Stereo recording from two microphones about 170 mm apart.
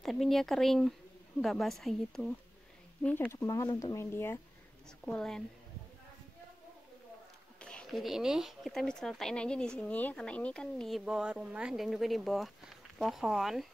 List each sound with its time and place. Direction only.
0.0 s speech: centre (ahead or behind)
3.4 s speech: 20° left (ahead or behind)
5.0 s speech: 5° left (ahead or behind)
7.6 s speech: 5° left (ahead or behind)